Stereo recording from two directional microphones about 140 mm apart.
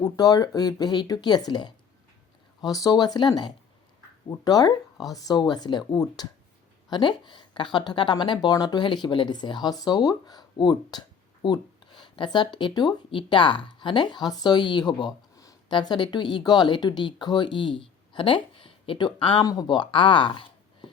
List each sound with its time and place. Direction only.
0.0 s speech: 25° left (ahead or behind)